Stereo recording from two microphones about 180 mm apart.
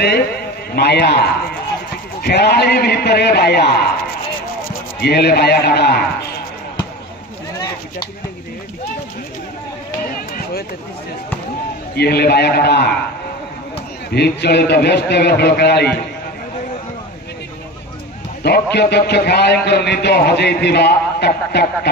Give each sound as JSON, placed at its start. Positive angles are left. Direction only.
{"t": 0.7, "sound": "a man's voice", "side_deg": 65}
{"t": 11.9, "sound": "a man's voice", "side_deg": 65}
{"t": 14.1, "sound": "a man's voice", "side_deg": 65}
{"t": 18.4, "sound": "a man's voice", "side_deg": 65}